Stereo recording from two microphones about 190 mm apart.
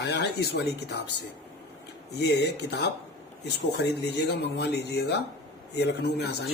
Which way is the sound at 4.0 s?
60° left (ahead or behind).